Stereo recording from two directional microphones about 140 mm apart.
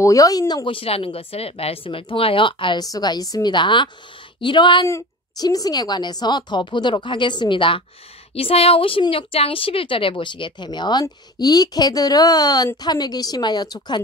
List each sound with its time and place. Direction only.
0.0 s speech: 25° left (ahead or behind)
0.7 s speech: 40° left (ahead or behind)
4.8 s speech: 25° left (ahead or behind)